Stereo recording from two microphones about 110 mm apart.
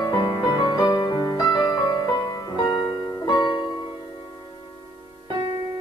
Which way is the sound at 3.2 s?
45° left (ahead or behind).